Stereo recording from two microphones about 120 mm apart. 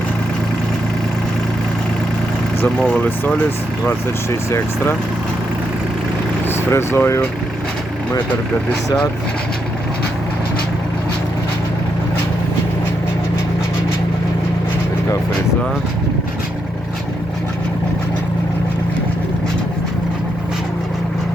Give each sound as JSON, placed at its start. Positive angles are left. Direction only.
{"t": 2.6, "sound": "speech", "side_deg": 10}
{"t": 6.7, "sound": "speech", "side_deg": 20}